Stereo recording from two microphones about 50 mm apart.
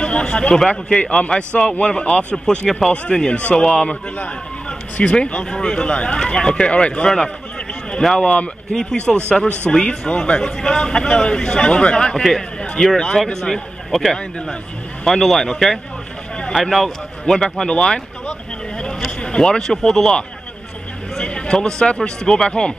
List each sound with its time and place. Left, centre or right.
0.0 s a man's voice: left
0.6 s speech: centre
0.9 s a man's voice: left
2.3 s a man's voice: centre
8.2 s a man's voice: left
12.1 s a man's voice: centre
15.0 s a man's voice: centre
19.2 s speech: centre
21.2 s speech: centre